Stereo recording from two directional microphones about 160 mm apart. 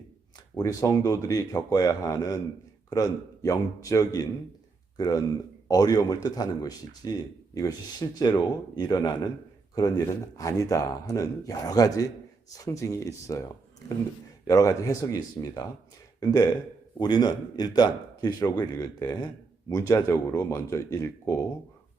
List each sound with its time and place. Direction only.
0.5 s a man's voice: 20° left (ahead or behind)